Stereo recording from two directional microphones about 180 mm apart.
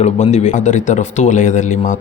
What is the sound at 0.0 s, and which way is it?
Speech, 40° left (ahead or behind).